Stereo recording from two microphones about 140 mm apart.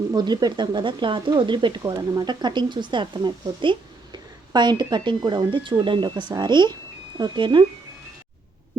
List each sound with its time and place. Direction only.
0.1 s speech: 30° right (ahead or behind)